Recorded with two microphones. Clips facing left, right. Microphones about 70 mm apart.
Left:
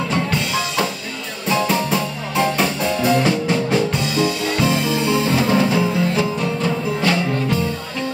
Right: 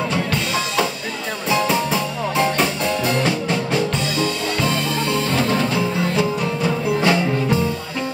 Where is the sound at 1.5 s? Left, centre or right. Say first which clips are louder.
Left 1 dB; centre.